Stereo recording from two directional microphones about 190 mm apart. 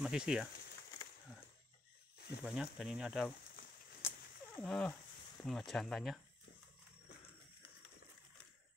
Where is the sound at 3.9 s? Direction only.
15° left (ahead or behind).